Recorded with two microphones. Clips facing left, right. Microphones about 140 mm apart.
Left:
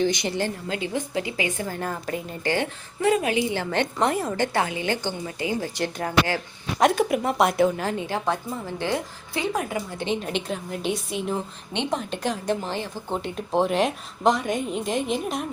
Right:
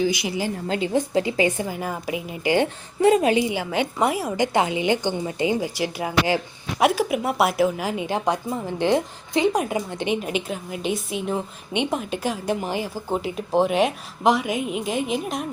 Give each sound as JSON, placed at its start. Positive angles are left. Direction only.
{"t": 0.0, "sound": "a woman's voice", "side_deg": -5}
{"t": 0.7, "sound": "speech", "side_deg": -30}
{"t": 1.6, "sound": "a woman's voice", "side_deg": -10}
{"t": 3.5, "sound": "a woman's voice", "side_deg": -10}
{"t": 10.2, "sound": "a woman's voice", "side_deg": -5}